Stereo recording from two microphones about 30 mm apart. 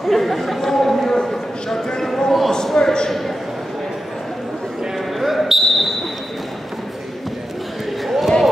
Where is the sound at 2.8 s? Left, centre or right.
Left.